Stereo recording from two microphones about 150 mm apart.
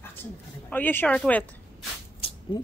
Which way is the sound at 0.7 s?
10° left (ahead or behind).